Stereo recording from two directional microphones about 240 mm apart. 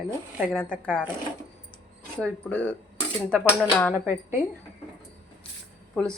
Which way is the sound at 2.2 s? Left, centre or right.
Centre.